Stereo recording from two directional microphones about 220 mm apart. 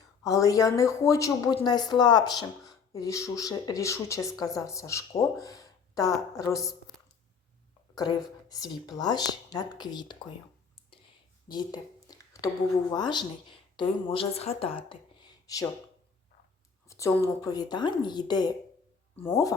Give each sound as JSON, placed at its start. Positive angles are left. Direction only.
{"t": 0.2, "sound": "speech", "side_deg": 15}
{"t": 7.9, "sound": "speech", "side_deg": 15}
{"t": 11.4, "sound": "a sound", "side_deg": 20}
{"t": 12.9, "sound": "a woman's voice", "side_deg": 20}
{"t": 16.9, "sound": "speech", "side_deg": 15}